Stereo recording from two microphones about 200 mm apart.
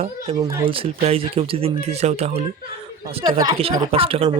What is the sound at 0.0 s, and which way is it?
Speech, 30° right (ahead or behind).